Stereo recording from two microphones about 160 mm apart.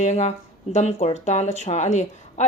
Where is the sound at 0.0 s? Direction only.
45° left (ahead or behind).